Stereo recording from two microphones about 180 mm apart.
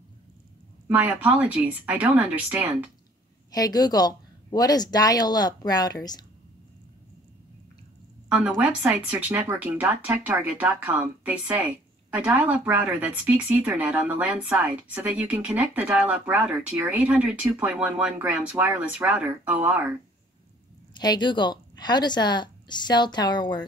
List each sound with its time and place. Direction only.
0.8 s speech: 10° right (ahead or behind)
3.5 s speech: 20° left (ahead or behind)
8.3 s speech: 5° right (ahead or behind)
21.0 s speech: 25° left (ahead or behind)